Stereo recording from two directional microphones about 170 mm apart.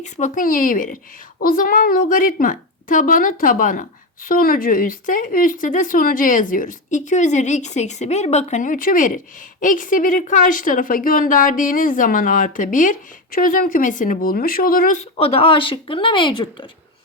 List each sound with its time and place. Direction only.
0.0 s a woman's voice: 50° left (ahead or behind)
15.1 s speech: 35° left (ahead or behind)